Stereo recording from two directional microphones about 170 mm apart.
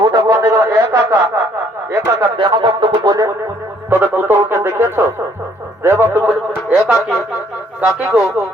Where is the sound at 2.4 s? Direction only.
30° right (ahead or behind).